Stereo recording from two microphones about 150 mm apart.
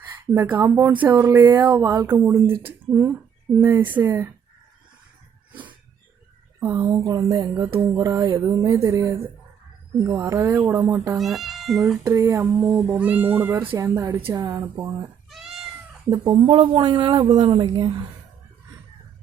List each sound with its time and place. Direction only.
0.3 s speech: 15° right (ahead or behind)
3.6 s speech: 15° right (ahead or behind)
6.6 s speech: 15° right (ahead or behind)
11.2 s speech: centre (ahead or behind)
12.0 s a woman's voice: 20° right (ahead or behind)